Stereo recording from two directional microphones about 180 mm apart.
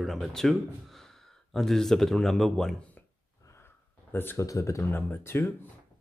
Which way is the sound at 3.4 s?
15° left (ahead or behind).